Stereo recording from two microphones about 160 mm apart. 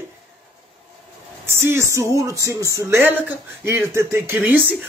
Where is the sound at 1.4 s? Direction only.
15° right (ahead or behind).